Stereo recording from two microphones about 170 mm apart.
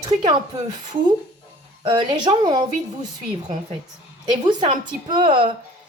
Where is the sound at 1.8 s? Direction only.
25° right (ahead or behind).